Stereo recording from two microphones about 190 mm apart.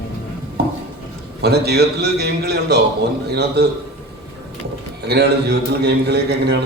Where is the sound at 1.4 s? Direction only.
60° right (ahead or behind).